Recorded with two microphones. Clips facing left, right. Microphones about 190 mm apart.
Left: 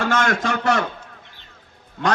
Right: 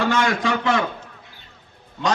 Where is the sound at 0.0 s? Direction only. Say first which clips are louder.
Even; 45° left (ahead or behind).